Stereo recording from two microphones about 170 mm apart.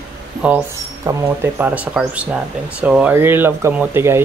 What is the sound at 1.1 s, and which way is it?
Speech, 15° right (ahead or behind).